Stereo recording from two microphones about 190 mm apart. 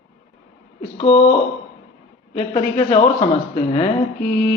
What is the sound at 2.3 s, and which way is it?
Speech, 30° left (ahead or behind).